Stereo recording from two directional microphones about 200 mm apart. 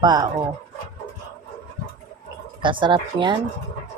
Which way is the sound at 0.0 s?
20° right (ahead or behind).